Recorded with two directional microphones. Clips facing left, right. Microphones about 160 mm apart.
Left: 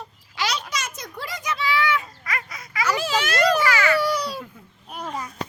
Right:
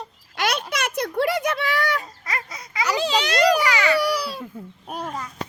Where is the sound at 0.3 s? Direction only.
55° right (ahead or behind).